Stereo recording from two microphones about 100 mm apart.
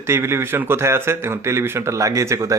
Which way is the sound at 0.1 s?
25° right (ahead or behind).